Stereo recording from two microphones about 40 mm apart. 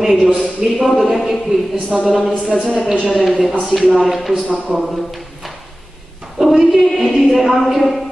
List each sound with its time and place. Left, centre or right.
0.0 s speech: centre
4.7 s speech: right
6.4 s a woman's voice: centre